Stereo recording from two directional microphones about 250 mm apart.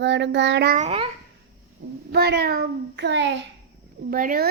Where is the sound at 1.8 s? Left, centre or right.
Right.